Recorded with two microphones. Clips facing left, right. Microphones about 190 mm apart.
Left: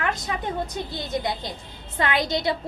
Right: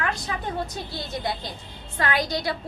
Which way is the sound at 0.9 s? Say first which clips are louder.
Left 2 dB; 20° left (ahead or behind).